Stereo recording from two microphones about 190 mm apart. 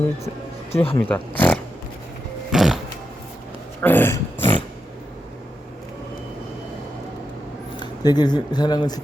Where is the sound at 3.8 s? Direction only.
10° left (ahead or behind).